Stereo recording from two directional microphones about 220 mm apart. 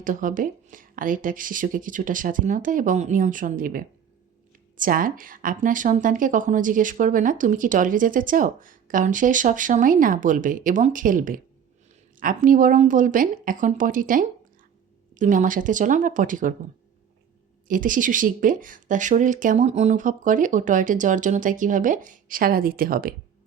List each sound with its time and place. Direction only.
0.0 s speech: 35° right (ahead or behind)
17.7 s speech: 40° right (ahead or behind)